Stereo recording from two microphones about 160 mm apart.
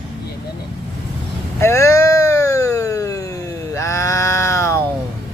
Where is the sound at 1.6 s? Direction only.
20° left (ahead or behind).